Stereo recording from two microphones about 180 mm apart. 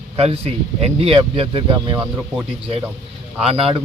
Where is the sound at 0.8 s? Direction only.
35° right (ahead or behind).